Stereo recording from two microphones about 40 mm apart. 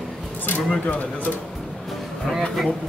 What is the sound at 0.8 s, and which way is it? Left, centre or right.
Speech, left.